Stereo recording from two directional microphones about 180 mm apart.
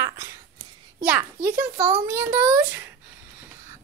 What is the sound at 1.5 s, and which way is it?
Speech, 15° right (ahead or behind).